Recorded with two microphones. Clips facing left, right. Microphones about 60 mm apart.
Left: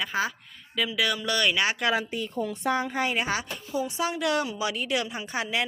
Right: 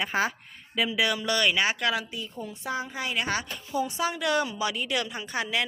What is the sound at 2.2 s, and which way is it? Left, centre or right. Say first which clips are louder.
Speech: left 7 dB; left.